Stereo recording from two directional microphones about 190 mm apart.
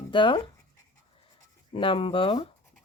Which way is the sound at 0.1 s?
25° left (ahead or behind).